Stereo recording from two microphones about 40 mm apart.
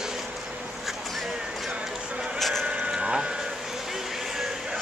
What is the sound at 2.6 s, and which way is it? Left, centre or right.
Vehicle, right.